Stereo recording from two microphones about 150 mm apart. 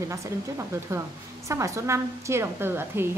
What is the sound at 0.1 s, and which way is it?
A woman's voice, 20° right (ahead or behind).